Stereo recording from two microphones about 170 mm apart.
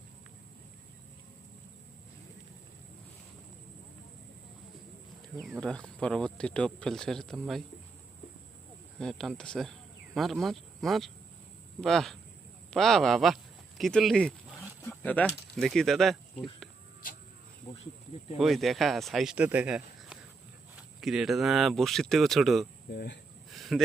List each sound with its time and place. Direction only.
5.5 s speech: 5° left (ahead or behind)
9.0 s speech: 5° left (ahead or behind)
18.3 s speech: centre (ahead or behind)
22.9 s speech: 70° left (ahead or behind)
23.5 s a sound: centre (ahead or behind)